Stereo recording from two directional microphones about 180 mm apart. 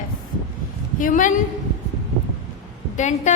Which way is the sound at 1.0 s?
45° left (ahead or behind).